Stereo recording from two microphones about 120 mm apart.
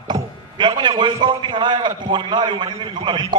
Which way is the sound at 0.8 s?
40° right (ahead or behind).